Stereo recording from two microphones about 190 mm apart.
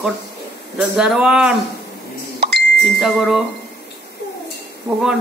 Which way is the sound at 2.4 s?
60° right (ahead or behind).